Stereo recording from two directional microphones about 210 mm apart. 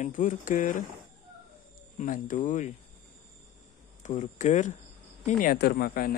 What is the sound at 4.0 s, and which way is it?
Speech, 35° left (ahead or behind).